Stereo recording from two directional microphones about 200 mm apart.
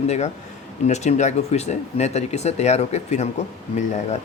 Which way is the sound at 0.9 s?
35° left (ahead or behind).